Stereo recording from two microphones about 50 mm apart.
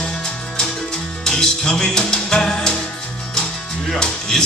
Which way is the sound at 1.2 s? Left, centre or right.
Centre.